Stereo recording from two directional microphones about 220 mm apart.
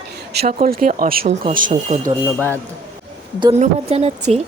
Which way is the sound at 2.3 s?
10° left (ahead or behind).